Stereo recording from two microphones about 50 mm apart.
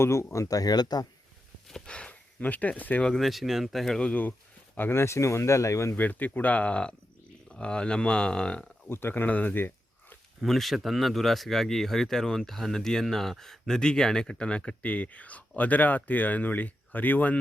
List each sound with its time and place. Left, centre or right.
0.0 s speech: left
1.9 s speech: left
2.4 s speech: left
3.2 s speech: centre
4.1 s speech: left
4.9 s speech: left
6.0 s speech: left; by 8.6 s centre
8.9 s speech: left
10.4 s speech: centre; by 17.3 s left